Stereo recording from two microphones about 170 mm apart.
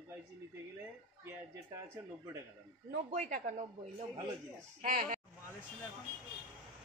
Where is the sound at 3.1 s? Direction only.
50° right (ahead or behind).